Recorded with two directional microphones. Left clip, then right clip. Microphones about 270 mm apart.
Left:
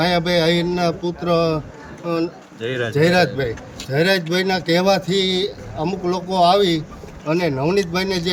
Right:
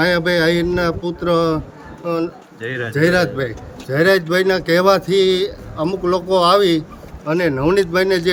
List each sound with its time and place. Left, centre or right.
0.0 s a man's voice: centre
2.6 s a man's voice: left
2.9 s a man's voice: centre